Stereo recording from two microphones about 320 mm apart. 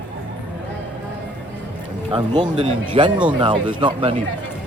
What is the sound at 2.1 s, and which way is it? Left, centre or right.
A man's voice, centre.